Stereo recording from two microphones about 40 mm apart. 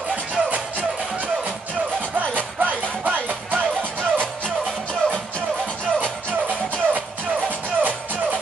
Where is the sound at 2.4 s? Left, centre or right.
Right.